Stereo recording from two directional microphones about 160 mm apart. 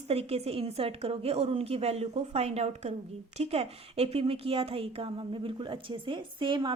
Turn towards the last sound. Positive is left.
turn(degrees=-30)  # may be behind; listen again after turning